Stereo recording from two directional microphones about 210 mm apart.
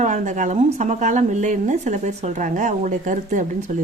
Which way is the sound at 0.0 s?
35° right (ahead or behind).